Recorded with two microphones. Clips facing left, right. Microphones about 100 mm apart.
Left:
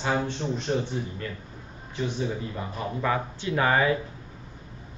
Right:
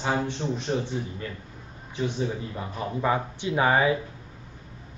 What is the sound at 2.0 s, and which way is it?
A man's voice, 15° right (ahead or behind).